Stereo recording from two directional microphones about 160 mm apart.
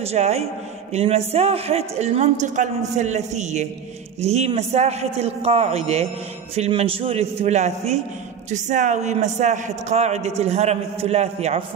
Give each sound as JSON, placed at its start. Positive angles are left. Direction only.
{"t": 0.0, "sound": "a man's voice", "side_deg": -40}